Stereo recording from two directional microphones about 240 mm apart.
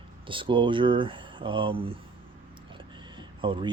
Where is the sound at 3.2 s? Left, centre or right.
Centre.